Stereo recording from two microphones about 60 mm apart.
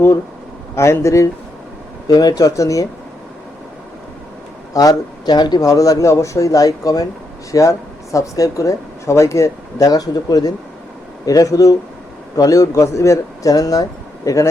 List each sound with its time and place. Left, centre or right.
0.8 s speech: left
2.0 s speech: left
4.7 s a man's voice: left
7.5 s speech: left